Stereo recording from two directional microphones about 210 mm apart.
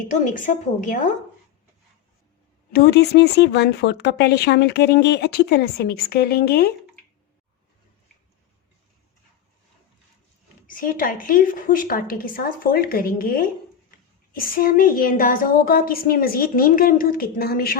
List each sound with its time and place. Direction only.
0.1 s a woman's voice: 40° left (ahead or behind)
2.7 s speech: 50° left (ahead or behind)
10.7 s speech: 40° left (ahead or behind)